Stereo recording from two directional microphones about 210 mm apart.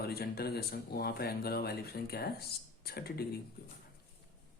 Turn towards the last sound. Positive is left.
turn(degrees=50)  # may be behind; listen again after turning